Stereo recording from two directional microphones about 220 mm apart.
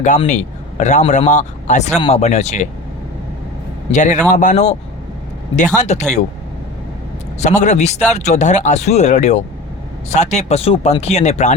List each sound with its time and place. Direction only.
0.0 s speech: 30° left (ahead or behind)
3.9 s speech: 35° left (ahead or behind)
7.3 s speech: 30° left (ahead or behind)